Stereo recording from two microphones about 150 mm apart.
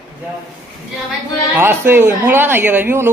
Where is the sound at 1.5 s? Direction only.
15° right (ahead or behind).